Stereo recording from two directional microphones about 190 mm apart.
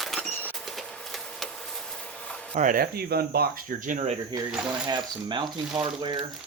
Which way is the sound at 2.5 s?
45° right (ahead or behind).